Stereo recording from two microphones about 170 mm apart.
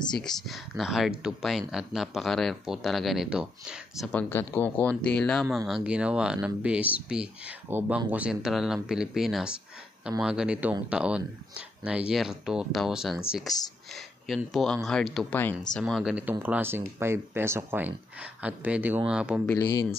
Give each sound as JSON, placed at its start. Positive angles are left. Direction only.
{"t": 0.1, "sound": "speech", "side_deg": 5}
{"t": 4.1, "sound": "speech", "side_deg": 10}
{"t": 19.4, "sound": "speech", "side_deg": 20}